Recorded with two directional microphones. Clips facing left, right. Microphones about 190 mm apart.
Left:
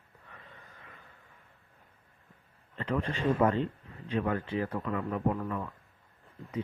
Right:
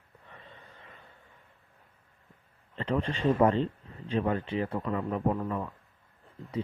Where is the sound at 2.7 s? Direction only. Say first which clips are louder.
Right 2 dB; 30° right (ahead or behind).